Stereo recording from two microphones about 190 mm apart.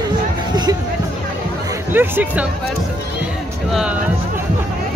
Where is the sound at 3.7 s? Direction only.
5° right (ahead or behind).